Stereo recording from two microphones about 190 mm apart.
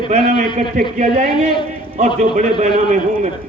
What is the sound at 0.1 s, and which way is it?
A man's voice, 40° right (ahead or behind).